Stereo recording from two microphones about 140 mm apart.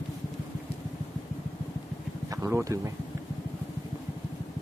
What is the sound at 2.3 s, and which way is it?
Speech, 20° right (ahead or behind).